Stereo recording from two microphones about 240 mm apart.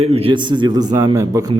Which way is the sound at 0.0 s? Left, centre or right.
Right.